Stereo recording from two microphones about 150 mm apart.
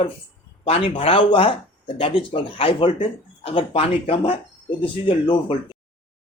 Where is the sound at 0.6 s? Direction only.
40° left (ahead or behind).